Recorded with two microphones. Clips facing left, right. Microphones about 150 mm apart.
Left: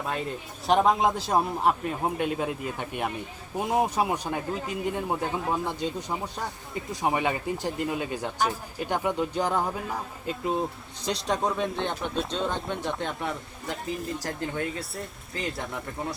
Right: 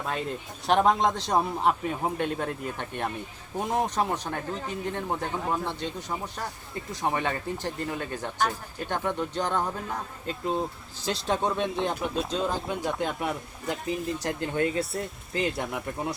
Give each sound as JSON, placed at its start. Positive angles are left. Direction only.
{"t": 0.0, "sound": "speech", "side_deg": 0}
{"t": 14.2, "sound": "speech", "side_deg": -20}
{"t": 14.8, "sound": "speech", "side_deg": 0}